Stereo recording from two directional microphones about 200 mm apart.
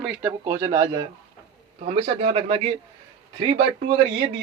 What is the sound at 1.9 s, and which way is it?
Speech, 30° right (ahead or behind).